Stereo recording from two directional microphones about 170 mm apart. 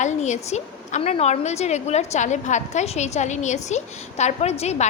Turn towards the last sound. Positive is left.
turn(degrees=40)  # may be behind; listen again after turning